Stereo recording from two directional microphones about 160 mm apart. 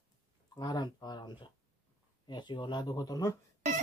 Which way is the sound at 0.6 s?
25° left (ahead or behind).